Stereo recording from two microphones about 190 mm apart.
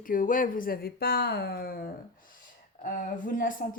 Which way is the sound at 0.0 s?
45° left (ahead or behind).